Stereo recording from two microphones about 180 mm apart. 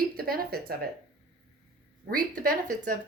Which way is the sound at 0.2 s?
55° right (ahead or behind).